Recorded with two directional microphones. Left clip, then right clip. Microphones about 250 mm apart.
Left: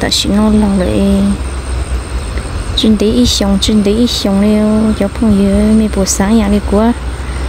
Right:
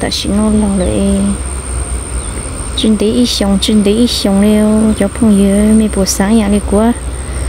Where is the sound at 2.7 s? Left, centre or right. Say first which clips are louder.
Left 1 dB; centre.